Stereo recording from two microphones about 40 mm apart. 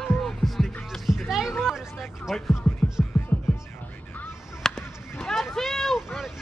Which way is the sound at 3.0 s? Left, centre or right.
Left.